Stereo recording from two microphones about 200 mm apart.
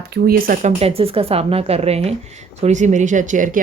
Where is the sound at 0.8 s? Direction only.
30° right (ahead or behind).